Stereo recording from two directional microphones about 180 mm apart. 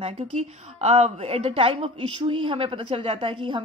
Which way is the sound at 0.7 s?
35° right (ahead or behind).